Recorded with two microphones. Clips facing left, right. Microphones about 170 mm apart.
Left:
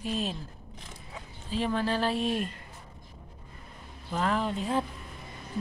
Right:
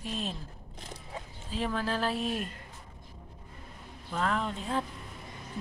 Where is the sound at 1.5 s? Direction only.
Centre (ahead or behind).